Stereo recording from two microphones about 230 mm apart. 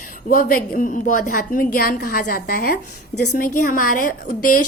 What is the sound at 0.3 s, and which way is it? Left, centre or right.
A woman's voice, left.